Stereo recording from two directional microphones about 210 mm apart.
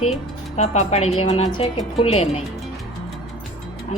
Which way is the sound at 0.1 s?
30° left (ahead or behind).